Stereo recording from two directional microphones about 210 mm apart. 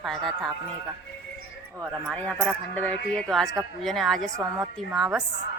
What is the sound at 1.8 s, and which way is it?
A woman's voice, 5° left (ahead or behind).